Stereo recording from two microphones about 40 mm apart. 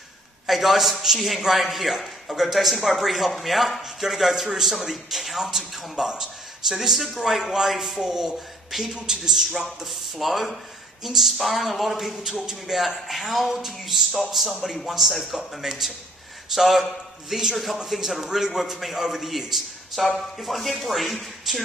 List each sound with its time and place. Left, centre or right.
0.5 s a man's voice: centre
6.0 s a man's voice: centre
9.8 s a man's voice: centre
12.2 s a man's voice: centre